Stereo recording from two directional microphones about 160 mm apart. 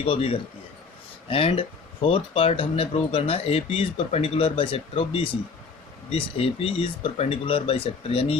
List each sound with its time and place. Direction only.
0.0 s speech: 35° left (ahead or behind)